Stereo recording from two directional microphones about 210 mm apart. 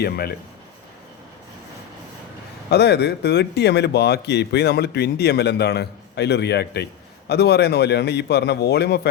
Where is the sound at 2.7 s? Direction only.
50° left (ahead or behind).